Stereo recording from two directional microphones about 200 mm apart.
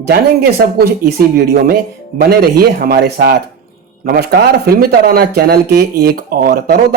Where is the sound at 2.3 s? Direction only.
50° right (ahead or behind).